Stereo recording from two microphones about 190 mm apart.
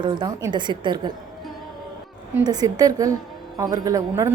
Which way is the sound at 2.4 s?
20° right (ahead or behind).